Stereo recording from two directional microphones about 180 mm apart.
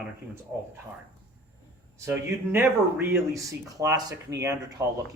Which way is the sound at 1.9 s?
15° right (ahead or behind).